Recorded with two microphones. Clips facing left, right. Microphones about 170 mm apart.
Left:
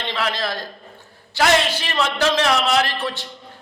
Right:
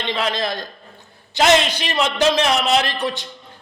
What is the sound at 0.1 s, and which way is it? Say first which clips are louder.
A man's voice: right 2 dB; 20° right (ahead or behind).